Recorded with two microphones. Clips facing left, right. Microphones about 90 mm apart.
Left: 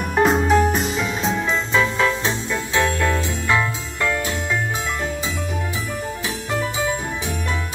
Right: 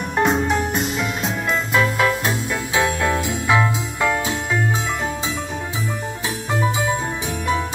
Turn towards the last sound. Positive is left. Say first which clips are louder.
# right 2 dB
turn(degrees=-20)  # may be behind; listen again after turning